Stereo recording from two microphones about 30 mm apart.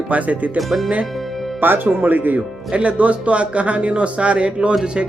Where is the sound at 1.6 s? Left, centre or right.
Right.